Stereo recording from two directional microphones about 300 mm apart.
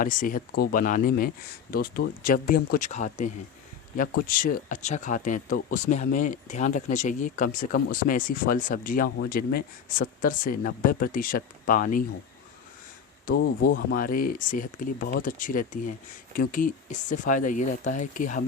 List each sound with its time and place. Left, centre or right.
0.0 s speech: left
13.2 s speech: left